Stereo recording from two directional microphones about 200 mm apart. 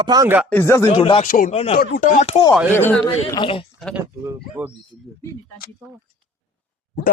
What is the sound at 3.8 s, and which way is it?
Speech, centre (ahead or behind).